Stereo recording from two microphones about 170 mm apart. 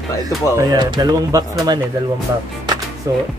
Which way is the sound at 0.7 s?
25° right (ahead or behind).